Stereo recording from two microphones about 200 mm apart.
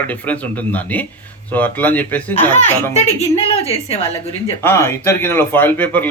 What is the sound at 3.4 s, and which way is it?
Speech, 30° left (ahead or behind).